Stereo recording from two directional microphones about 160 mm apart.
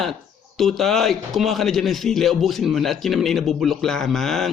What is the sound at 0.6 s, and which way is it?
A man's voice, centre (ahead or behind).